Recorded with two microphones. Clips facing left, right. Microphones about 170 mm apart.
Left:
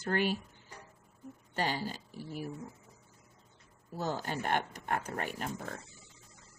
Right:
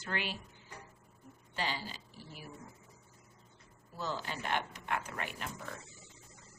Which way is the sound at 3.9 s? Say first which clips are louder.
Left 4 dB; 50° left (ahead or behind).